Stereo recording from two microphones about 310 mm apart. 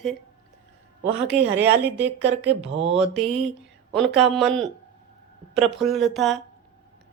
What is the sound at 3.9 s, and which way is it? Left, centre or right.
Speech, centre.